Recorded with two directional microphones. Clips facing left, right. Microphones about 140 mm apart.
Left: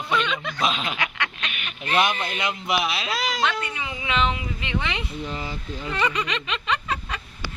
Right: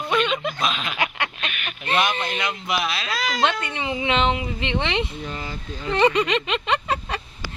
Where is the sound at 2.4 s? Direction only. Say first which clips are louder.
Even; 20° left (ahead or behind).